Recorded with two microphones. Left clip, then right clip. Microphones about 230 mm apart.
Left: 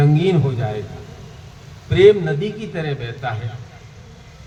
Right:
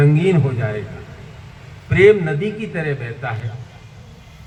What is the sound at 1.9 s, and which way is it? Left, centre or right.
A man's voice, left.